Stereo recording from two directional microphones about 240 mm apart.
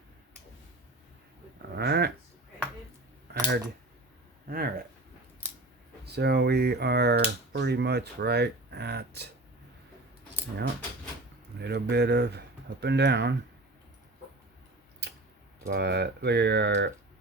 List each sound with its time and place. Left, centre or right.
1.7 s speech: right
3.3 s a sound: right
4.4 s speech: right
6.1 s speech: right
11.6 s speech: right
15.6 s speech: right